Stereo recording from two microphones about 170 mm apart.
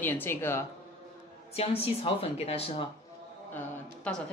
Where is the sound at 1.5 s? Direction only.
35° left (ahead or behind).